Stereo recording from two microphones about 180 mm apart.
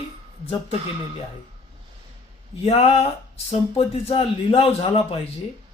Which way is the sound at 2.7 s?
35° left (ahead or behind).